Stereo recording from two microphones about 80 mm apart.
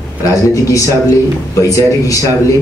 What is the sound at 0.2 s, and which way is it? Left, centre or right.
Speech, left.